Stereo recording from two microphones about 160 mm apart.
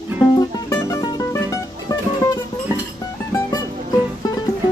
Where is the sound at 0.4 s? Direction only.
20° left (ahead or behind).